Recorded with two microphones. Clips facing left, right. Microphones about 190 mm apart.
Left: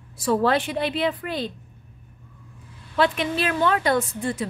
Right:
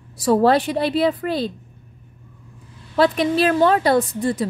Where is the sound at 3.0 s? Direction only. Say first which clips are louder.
Right 5 dB; 35° right (ahead or behind).